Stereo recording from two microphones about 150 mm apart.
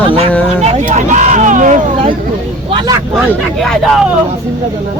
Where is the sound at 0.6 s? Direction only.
50° right (ahead or behind).